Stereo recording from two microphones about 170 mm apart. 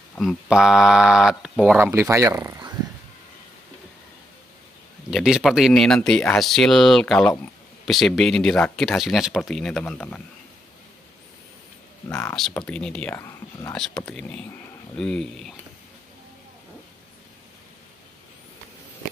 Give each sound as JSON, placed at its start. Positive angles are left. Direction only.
{"t": 0.2, "sound": "speech", "side_deg": 0}
{"t": 1.8, "sound": "speech", "side_deg": -15}
{"t": 5.1, "sound": "speech", "side_deg": 0}
{"t": 12.6, "sound": "speech", "side_deg": 5}
{"t": 13.7, "sound": "speech", "side_deg": 5}